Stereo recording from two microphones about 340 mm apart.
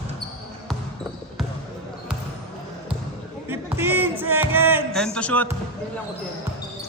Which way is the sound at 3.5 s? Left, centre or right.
Centre.